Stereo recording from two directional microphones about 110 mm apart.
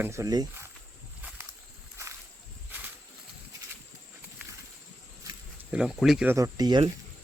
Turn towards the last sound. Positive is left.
turn(degrees=-40)  # may be behind; listen again after turning